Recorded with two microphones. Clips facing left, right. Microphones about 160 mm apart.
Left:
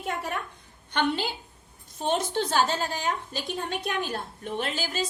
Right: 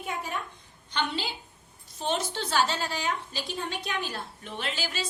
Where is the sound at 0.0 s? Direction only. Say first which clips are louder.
Left 3 dB; 65° left (ahead or behind).